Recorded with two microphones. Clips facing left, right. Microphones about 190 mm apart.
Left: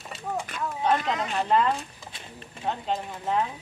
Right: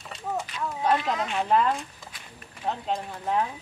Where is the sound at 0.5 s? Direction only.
50° left (ahead or behind).